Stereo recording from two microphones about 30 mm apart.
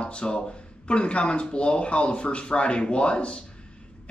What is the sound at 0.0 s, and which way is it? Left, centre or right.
Speech, left.